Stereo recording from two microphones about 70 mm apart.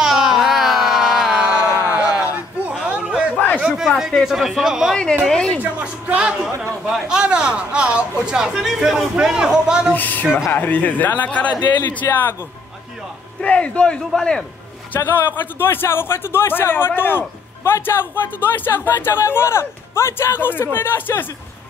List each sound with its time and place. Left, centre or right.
0.0 s carnatic music: centre
2.0 s a sound: centre
3.5 s speech: centre
4.9 s a man's voice: centre
5.6 s a woman's voice: centre
9.9 s a man's voice: left
13.4 s a man's voice: centre
15.0 s speech: left